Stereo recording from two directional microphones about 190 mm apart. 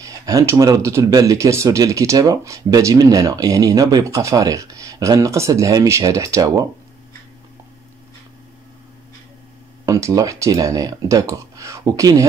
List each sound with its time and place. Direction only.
0.0 s speech: 20° right (ahead or behind)
9.8 s speech: 15° right (ahead or behind)